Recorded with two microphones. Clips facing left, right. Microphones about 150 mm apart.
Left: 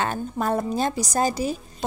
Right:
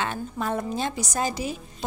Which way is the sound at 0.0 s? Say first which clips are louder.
Left 3 dB; 45° left (ahead or behind).